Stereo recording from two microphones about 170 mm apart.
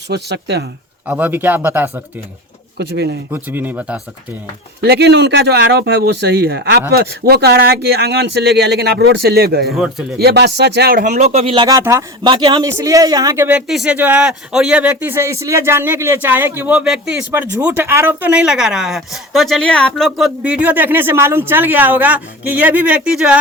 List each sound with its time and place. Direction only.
0.1 s a man's voice: 80° right
1.0 s speech: 10° right (ahead or behind)
2.7 s speech: 75° right (ahead or behind)
3.3 s speech: 10° right (ahead or behind)
4.8 s a man's voice: 75° right (ahead or behind)
9.7 s speech: 5° right (ahead or behind)
10.2 s speech: 75° right (ahead or behind)
11.0 s speech: 45° right (ahead or behind); by 11.8 s 30° right (ahead or behind)
11.8 s speech: 15° right (ahead or behind)
12.2 s speech: 25° right (ahead or behind); by 23.4 s 5° right (ahead or behind)